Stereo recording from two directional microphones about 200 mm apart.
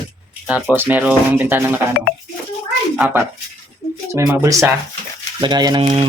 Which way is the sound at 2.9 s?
5° right (ahead or behind).